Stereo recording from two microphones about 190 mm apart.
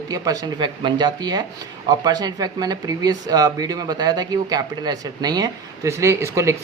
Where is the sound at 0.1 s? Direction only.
20° right (ahead or behind).